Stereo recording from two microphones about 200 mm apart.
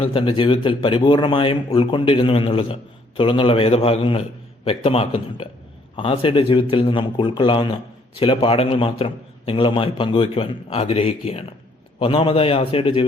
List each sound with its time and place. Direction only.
0.0 s a man's voice: 25° left (ahead or behind)